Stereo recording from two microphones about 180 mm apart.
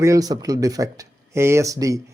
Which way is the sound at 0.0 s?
20° right (ahead or behind).